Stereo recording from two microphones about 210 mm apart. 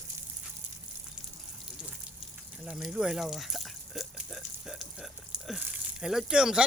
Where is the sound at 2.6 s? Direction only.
Centre (ahead or behind).